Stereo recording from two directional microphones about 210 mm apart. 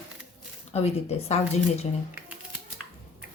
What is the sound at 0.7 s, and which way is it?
Speech, 30° left (ahead or behind).